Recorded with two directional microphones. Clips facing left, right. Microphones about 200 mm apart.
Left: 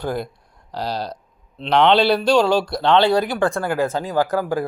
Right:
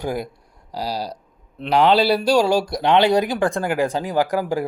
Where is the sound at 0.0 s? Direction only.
10° right (ahead or behind).